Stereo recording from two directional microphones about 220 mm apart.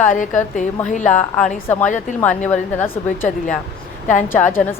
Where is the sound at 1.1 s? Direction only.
5° left (ahead or behind).